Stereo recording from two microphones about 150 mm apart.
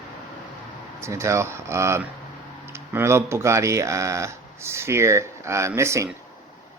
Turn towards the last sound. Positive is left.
turn(degrees=-20)  # may be behind; listen again after turning